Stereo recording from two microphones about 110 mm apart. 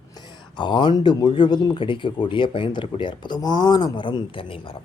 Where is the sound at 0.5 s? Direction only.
45° left (ahead or behind).